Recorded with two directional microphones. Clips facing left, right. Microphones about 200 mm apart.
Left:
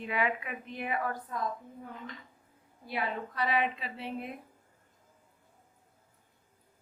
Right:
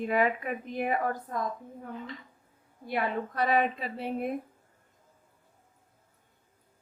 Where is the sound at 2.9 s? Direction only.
50° right (ahead or behind).